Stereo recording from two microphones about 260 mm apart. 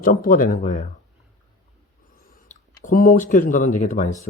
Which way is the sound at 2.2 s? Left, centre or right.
Left.